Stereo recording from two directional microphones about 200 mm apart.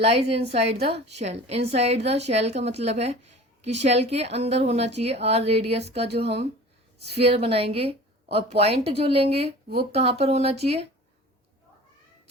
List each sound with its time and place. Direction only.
0.0 s a woman's voice: 30° right (ahead or behind)